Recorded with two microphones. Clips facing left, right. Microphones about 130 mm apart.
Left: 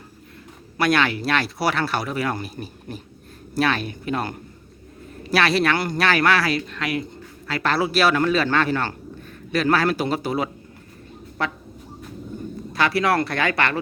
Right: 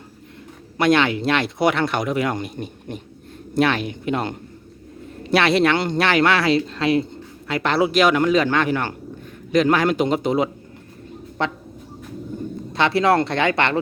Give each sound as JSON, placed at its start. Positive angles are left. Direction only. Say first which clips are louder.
{"t": 0.8, "sound": "speech", "louder": "right 3 dB", "side_deg": -20}
{"t": 12.7, "sound": "speech", "louder": "right 3 dB", "side_deg": -25}